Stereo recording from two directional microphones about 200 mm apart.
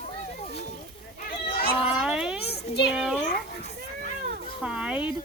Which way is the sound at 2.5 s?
55° left (ahead or behind).